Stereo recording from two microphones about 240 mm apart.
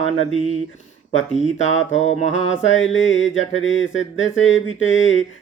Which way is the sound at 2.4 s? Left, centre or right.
Left.